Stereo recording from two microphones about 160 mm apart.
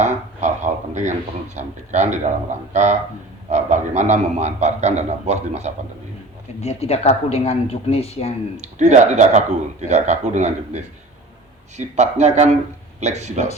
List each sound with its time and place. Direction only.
0.0 s a sound: 45° right (ahead or behind)
1.5 s speech: 50° right (ahead or behind)
6.6 s speech: 40° left (ahead or behind)
8.5 s speech: 45° right (ahead or behind)